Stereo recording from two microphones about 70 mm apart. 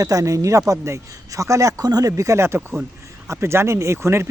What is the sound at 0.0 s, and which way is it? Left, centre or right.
Speech, right.